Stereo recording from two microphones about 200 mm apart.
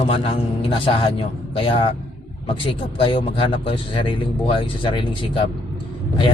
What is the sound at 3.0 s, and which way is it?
A man's voice, 25° left (ahead or behind).